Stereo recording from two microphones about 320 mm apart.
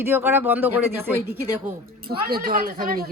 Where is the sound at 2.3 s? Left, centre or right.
Right.